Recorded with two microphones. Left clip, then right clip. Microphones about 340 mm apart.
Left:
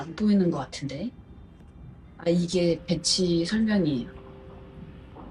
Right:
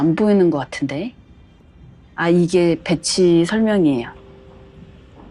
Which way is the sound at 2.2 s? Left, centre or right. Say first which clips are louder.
Right 9 dB; right.